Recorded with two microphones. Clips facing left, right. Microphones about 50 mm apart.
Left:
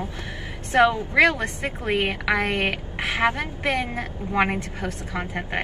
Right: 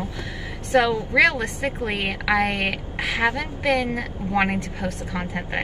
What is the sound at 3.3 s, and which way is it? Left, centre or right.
A woman's voice, left.